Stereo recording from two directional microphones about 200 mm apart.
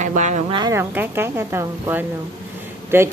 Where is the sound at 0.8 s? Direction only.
10° right (ahead or behind).